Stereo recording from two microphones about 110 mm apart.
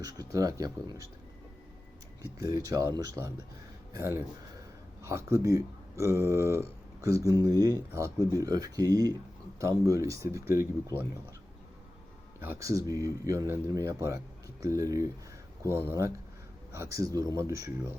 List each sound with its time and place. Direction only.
0.0 s speech: 35° right (ahead or behind)
2.5 s speech: 30° right (ahead or behind)
12.4 s speech: 25° right (ahead or behind)